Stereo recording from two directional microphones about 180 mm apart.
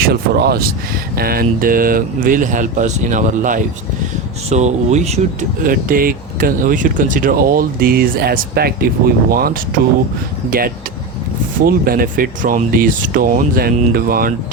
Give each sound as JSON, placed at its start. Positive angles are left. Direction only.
{"t": 0.0, "sound": "speech", "side_deg": -60}
{"t": 5.6, "sound": "speech", "side_deg": -55}
{"t": 11.6, "sound": "speech", "side_deg": -55}